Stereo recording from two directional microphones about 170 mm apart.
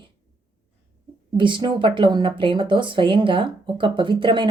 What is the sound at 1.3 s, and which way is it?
A woman's voice, 30° right (ahead or behind).